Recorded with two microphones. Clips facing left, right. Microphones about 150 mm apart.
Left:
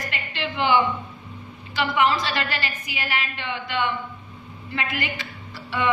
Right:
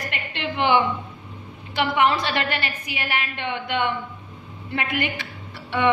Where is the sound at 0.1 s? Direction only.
60° right (ahead or behind).